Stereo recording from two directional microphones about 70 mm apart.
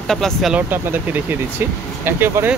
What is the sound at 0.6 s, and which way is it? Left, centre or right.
Speech, right.